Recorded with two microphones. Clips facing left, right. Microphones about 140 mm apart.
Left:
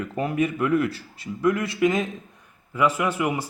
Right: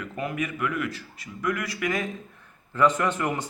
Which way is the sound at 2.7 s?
10° left (ahead or behind).